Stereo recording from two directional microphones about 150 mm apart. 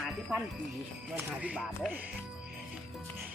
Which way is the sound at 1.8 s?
Centre (ahead or behind).